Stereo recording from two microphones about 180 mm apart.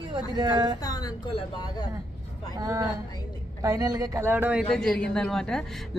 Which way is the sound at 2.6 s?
20° right (ahead or behind).